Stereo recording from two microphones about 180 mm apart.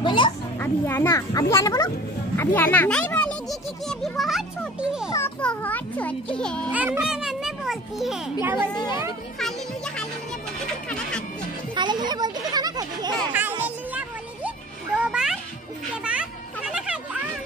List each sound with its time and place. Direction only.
0.0 s children playing: 25° left (ahead or behind)
0.6 s a child's voice: 15° left (ahead or behind); by 5.1 s 5° right (ahead or behind)
5.1 s a child's voice: 10° left (ahead or behind)
6.7 s a child's voice: 10° right (ahead or behind)
8.7 s a child's voice: 25° left (ahead or behind)
9.4 s music: 5° left (ahead or behind)
11.7 s a child's voice: 25° right (ahead or behind)
13.3 s music: 10° right (ahead or behind)
16.0 s a sound: 5° right (ahead or behind)